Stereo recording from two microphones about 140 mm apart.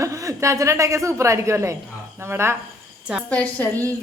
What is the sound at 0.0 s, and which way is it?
A woman's voice, 20° right (ahead or behind).